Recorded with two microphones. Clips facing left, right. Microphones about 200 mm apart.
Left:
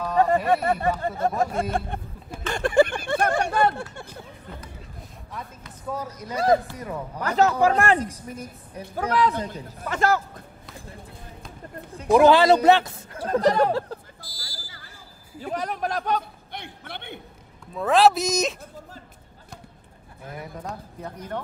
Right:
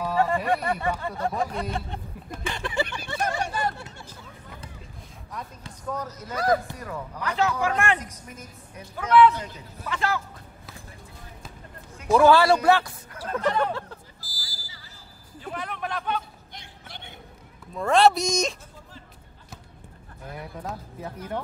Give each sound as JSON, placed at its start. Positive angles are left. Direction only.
{"t": 0.7, "sound": "speech", "side_deg": 40}
{"t": 5.9, "sound": "speech", "side_deg": 10}
{"t": 6.3, "sound": "a man's voice", "side_deg": 25}
{"t": 7.2, "sound": "a woman's voice", "side_deg": 40}
{"t": 12.1, "sound": "speech", "side_deg": 20}
{"t": 13.3, "sound": "a woman's voice", "side_deg": 40}
{"t": 14.2, "sound": "fire alarm", "side_deg": -5}
{"t": 15.4, "sound": "speech", "side_deg": 40}
{"t": 16.5, "sound": "a sound", "side_deg": 60}
{"t": 17.7, "sound": "speech", "side_deg": 0}
{"t": 20.3, "sound": "speech", "side_deg": 0}